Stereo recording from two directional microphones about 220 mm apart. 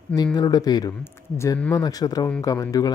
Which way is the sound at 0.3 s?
20° left (ahead or behind).